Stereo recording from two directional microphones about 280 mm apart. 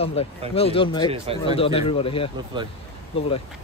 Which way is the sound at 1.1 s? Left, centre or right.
Right.